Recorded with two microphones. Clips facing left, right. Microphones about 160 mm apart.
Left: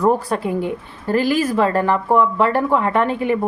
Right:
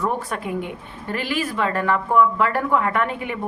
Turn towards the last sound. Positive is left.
turn(degrees=30)  # may be behind; listen again after turning